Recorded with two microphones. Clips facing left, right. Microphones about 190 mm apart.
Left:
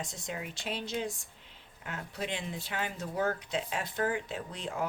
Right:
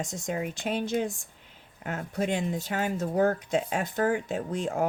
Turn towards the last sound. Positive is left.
turn(degrees=-45)  # may be behind; listen again after turning